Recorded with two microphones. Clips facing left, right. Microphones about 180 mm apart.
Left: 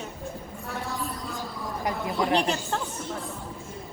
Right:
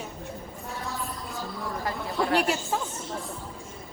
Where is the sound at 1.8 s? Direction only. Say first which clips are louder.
Left 2 dB; 20° left (ahead or behind).